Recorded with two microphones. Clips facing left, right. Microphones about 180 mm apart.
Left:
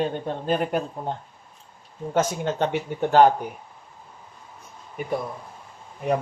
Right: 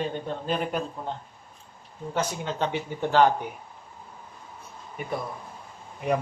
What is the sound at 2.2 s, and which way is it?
Speech, 45° left (ahead or behind).